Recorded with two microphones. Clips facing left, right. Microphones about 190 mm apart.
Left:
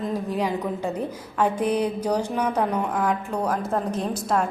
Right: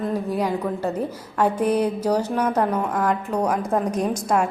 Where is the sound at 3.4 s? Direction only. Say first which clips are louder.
Right 3 dB; 10° right (ahead or behind).